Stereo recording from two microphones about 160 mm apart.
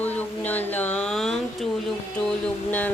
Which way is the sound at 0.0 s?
10° left (ahead or behind).